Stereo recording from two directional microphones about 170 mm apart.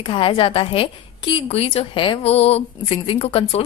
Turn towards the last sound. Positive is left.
turn(degrees=35)  # may be behind; listen again after turning